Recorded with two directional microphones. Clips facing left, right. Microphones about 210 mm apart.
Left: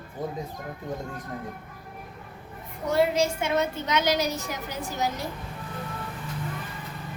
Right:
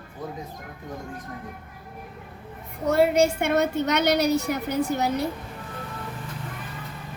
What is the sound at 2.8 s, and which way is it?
A woman's voice, 60° right (ahead or behind).